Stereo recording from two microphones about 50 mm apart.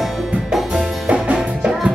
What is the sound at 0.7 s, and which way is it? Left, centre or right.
Music, right.